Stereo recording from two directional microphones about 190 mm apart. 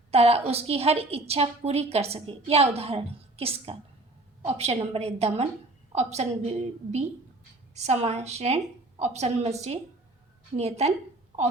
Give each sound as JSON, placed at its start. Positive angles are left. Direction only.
{"t": 0.1, "sound": "a woman's voice", "side_deg": -30}